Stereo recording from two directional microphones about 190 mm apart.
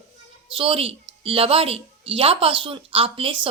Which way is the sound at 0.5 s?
30° right (ahead or behind).